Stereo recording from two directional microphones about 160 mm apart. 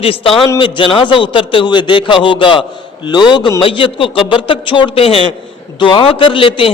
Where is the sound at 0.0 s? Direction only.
35° left (ahead or behind).